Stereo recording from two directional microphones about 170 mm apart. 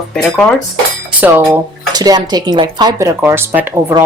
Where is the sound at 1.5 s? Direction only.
25° right (ahead or behind).